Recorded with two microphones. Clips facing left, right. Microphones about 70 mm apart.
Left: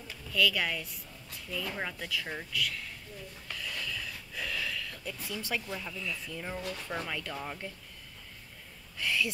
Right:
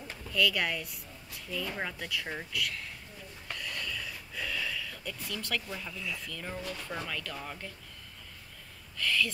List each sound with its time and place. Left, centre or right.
0.3 s speech: centre
3.4 s a sound: centre
5.5 s speech: centre
6.2 s speech: centre
7.1 s speech: left
8.9 s speech: centre